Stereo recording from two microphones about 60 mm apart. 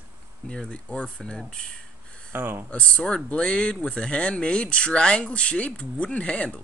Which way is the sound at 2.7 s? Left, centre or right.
Left.